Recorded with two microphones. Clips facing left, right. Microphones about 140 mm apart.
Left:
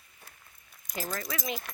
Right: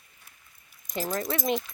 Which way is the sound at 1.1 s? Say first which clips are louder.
Right 8 dB; 30° right (ahead or behind).